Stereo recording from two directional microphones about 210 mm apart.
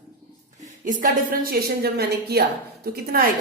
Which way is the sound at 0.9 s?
40° right (ahead or behind).